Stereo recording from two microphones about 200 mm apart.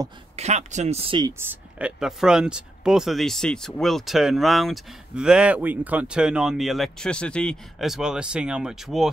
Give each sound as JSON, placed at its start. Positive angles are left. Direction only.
{"t": 0.4, "sound": "speech", "side_deg": -35}
{"t": 1.4, "sound": "speech", "side_deg": -10}